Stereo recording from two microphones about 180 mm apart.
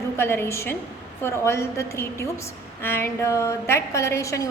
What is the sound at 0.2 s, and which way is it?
A woman's voice, 15° left (ahead or behind).